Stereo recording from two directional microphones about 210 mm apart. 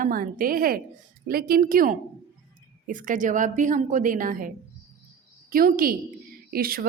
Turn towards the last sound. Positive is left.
turn(degrees=-45)  # may be behind; listen again after turning